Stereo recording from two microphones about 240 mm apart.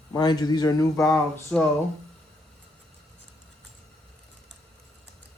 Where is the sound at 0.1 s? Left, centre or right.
Centre.